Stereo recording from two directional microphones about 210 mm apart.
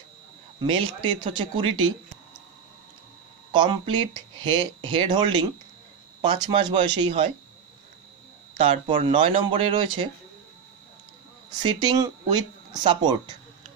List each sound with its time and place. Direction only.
0.6 s speech: 25° right (ahead or behind)
3.5 s speech: 25° right (ahead or behind)
8.5 s speech: 25° right (ahead or behind)
11.6 s speech: 20° right (ahead or behind)